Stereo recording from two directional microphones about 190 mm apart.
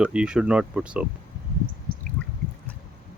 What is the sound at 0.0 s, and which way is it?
Speech, 5° right (ahead or behind).